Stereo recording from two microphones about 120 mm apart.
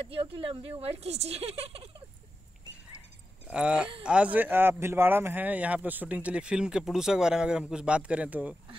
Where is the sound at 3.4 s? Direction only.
10° right (ahead or behind).